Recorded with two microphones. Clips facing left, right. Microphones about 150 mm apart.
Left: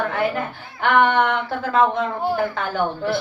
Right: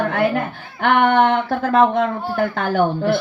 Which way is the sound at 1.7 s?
60° right (ahead or behind).